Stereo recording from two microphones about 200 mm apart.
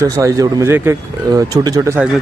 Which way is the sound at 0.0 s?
15° right (ahead or behind).